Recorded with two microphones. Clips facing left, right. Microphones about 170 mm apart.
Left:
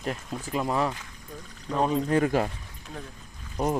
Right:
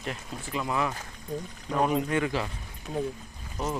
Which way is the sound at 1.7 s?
10° right (ahead or behind).